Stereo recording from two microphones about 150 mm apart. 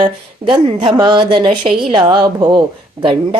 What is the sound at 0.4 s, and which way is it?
Speech, 35° right (ahead or behind).